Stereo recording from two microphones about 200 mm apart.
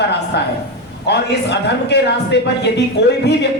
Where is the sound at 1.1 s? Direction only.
55° left (ahead or behind).